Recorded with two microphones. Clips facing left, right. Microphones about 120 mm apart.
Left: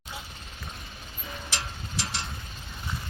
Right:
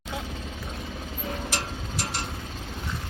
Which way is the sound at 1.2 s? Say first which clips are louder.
Right 5 dB; 60° right (ahead or behind).